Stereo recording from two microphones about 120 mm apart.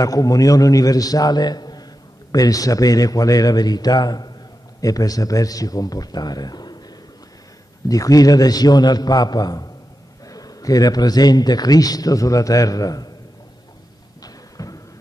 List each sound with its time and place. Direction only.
0.0 s speech: 30° left (ahead or behind)
7.9 s speech: 30° left (ahead or behind)
14.2 s a sound: 30° left (ahead or behind)